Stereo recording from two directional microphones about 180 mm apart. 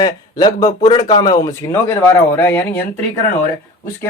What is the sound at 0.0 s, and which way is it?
Speech, 25° left (ahead or behind).